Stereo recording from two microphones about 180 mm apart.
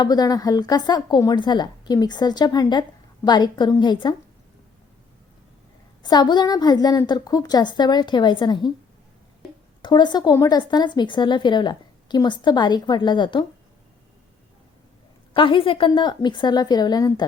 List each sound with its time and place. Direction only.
0.0 s speech: 20° left (ahead or behind)
6.0 s speech: 25° left (ahead or behind)
9.8 s speech: 25° left (ahead or behind)
15.3 s speech: 25° left (ahead or behind)